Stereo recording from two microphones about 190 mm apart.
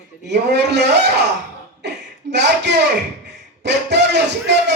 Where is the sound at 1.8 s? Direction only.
65° right (ahead or behind).